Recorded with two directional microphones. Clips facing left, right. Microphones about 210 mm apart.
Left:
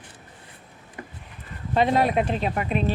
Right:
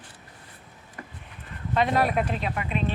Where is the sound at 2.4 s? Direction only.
40° left (ahead or behind).